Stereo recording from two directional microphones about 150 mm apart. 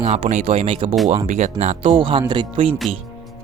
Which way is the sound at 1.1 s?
50° right (ahead or behind).